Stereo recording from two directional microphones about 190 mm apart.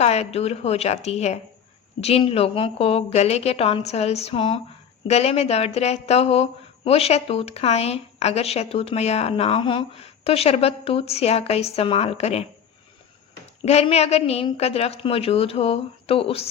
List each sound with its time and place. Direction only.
0.0 s speech: 35° left (ahead or behind)
13.7 s speech: 35° left (ahead or behind)